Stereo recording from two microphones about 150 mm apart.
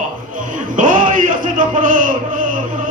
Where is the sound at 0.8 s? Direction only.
60° right (ahead or behind).